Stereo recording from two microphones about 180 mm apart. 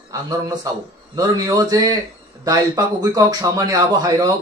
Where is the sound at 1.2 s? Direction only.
20° right (ahead or behind).